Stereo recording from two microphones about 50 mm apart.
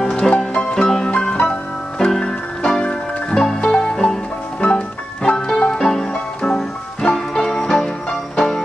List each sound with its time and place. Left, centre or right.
0.0 s music: centre